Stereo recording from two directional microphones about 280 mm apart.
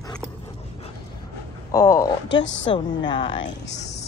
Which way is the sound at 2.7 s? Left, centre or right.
Centre.